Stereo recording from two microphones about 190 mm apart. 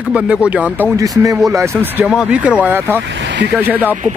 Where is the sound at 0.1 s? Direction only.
5° right (ahead or behind).